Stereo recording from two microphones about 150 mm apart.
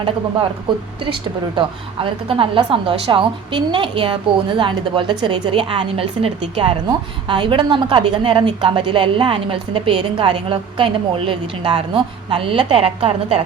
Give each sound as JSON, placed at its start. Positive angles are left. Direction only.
{"t": 0.7, "sound": "a woman's voice", "side_deg": -30}